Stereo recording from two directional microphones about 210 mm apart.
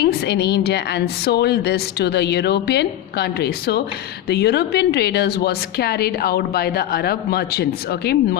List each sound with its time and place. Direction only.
0.0 s a woman's voice: 50° left (ahead or behind)